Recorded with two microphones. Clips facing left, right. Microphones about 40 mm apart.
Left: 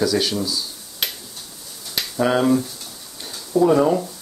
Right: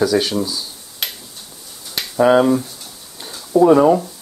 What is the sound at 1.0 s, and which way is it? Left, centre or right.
Tick-tock, centre.